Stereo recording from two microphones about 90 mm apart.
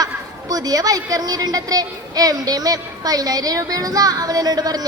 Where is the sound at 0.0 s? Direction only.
45° right (ahead or behind).